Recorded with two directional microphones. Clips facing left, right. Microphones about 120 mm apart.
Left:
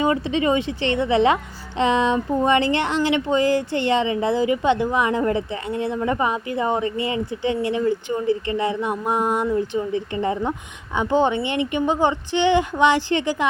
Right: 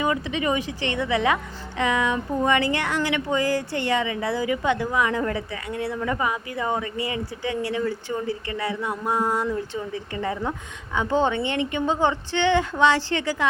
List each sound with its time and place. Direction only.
0.0 s a woman's voice: 30° left (ahead or behind)